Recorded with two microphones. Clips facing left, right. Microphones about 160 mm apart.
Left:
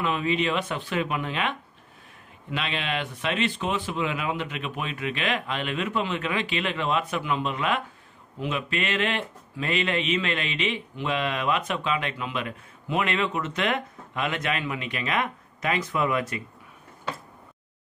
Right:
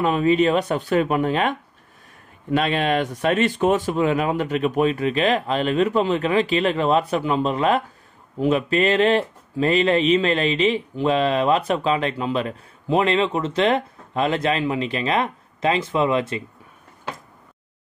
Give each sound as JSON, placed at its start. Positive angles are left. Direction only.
{"t": 0.0, "sound": "speech", "side_deg": -40}